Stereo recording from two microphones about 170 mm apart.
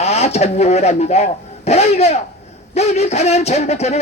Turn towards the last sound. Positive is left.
turn(degrees=40)  # may be behind; listen again after turning